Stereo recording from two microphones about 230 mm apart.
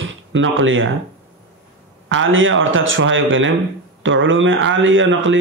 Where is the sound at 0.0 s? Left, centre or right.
Right.